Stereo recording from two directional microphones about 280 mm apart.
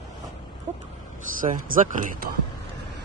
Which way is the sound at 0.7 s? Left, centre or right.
Right.